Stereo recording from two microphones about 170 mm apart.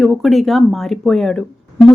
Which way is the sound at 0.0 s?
Centre (ahead or behind).